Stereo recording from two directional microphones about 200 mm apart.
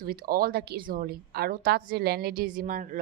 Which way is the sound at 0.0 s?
45° right (ahead or behind).